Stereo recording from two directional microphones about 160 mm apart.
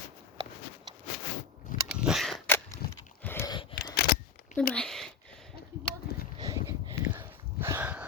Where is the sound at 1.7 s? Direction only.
55° left (ahead or behind).